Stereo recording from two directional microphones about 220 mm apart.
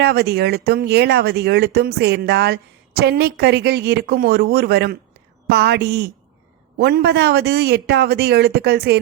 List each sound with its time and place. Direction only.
0.0 s speech: 45° right (ahead or behind)